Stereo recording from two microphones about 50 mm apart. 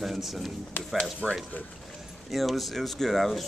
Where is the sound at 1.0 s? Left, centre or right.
Centre.